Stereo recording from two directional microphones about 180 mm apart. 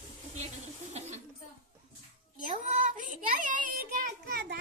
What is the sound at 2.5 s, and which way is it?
A child's voice, 40° right (ahead or behind).